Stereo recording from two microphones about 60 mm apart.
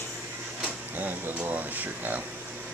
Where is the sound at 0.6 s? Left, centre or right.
Right.